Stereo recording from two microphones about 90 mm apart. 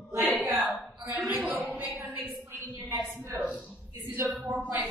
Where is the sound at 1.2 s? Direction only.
20° right (ahead or behind).